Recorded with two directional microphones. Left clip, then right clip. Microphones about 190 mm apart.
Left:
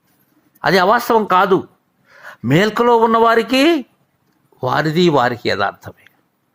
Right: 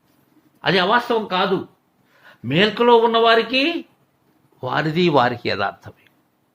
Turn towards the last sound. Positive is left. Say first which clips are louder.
# left 4 dB
turn(degrees=15)  # may be behind; listen again after turning